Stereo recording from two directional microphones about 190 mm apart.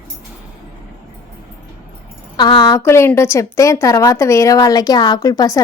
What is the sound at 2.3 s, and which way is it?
A woman's voice, 25° left (ahead or behind).